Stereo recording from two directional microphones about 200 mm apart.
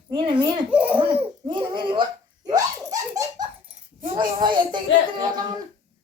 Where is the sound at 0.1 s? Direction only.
25° right (ahead or behind).